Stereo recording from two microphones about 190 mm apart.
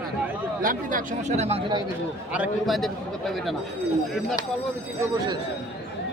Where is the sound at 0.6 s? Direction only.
45° right (ahead or behind); by 1.8 s 25° right (ahead or behind).